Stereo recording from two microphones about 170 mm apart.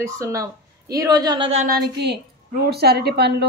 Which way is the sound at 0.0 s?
20° right (ahead or behind).